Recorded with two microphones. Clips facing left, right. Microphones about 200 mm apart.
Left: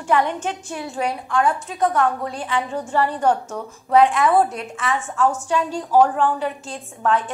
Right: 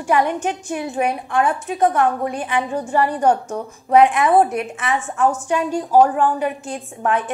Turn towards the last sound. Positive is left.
turn(degrees=-15)  # may be behind; listen again after turning